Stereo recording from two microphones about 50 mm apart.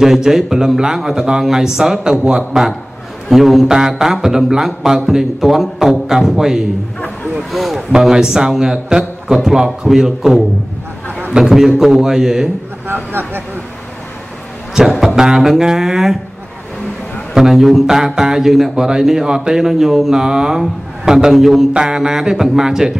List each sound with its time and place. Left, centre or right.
0.0 s a man's voice: centre
7.9 s speech: centre
12.8 s speech: right
14.8 s speech: centre
17.3 s speech: centre